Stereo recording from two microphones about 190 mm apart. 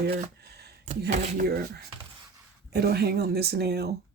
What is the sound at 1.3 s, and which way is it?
Speech, 50° right (ahead or behind).